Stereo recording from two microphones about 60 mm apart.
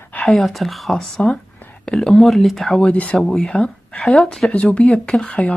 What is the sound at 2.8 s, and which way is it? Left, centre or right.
Speech, centre.